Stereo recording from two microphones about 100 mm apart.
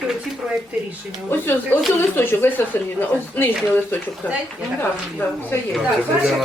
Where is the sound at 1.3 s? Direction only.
20° left (ahead or behind).